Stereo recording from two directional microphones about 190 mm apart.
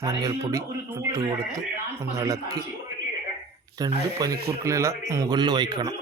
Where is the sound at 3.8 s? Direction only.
20° right (ahead or behind).